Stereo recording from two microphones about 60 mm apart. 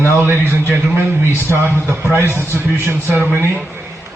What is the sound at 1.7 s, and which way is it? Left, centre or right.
A man's voice, right.